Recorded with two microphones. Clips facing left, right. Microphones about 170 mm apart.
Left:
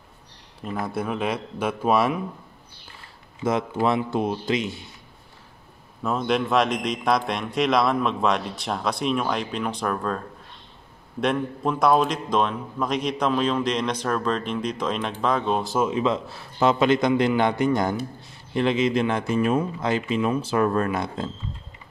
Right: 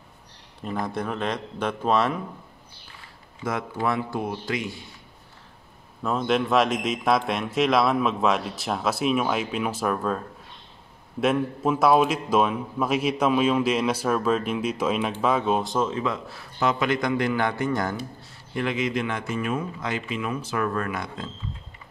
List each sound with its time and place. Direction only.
0.7 s speech: 5° left (ahead or behind)
3.4 s a man's voice: 20° left (ahead or behind)
6.0 s a man's voice: centre (ahead or behind)
15.9 s a man's voice: 25° left (ahead or behind)